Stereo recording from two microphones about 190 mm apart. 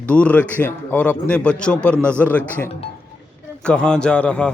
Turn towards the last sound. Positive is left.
turn(degrees=5)  # may be behind; listen again after turning